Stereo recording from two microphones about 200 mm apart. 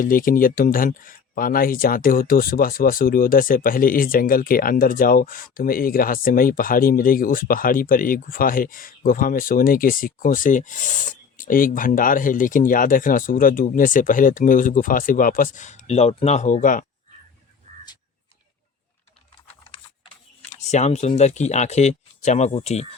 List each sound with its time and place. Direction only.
0.0 s speech: 45° left (ahead or behind)
20.7 s speech: 35° left (ahead or behind)